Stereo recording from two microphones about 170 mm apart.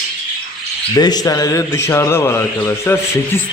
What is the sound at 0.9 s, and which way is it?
A man's voice, 20° left (ahead or behind).